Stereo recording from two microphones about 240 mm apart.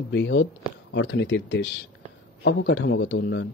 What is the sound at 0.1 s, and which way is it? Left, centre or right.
A man's voice, left.